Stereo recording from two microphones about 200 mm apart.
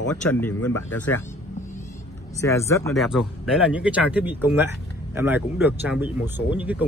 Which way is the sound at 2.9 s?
Centre (ahead or behind).